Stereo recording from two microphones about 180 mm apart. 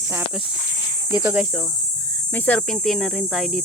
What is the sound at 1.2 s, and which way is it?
Speech, 10° right (ahead or behind).